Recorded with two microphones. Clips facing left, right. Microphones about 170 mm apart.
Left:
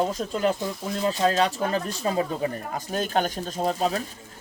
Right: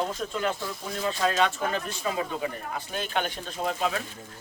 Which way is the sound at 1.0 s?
30° left (ahead or behind).